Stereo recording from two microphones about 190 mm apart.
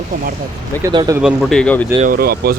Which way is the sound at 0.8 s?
20° right (ahead or behind).